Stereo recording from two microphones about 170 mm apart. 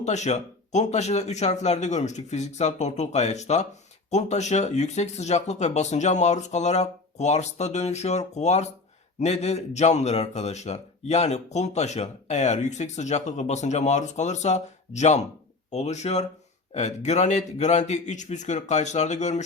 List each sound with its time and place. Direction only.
0.0 s a man's voice: 45° left (ahead or behind)